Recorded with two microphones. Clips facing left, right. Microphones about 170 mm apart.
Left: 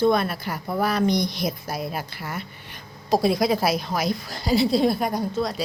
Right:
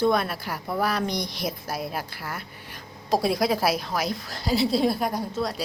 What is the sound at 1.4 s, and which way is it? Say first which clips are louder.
A woman's voice: left 2 dB; 5° right (ahead or behind).